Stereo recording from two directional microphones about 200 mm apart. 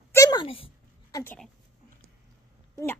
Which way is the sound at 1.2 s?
10° left (ahead or behind).